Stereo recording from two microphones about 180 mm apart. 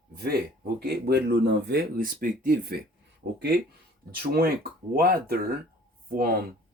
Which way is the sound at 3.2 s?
90° right.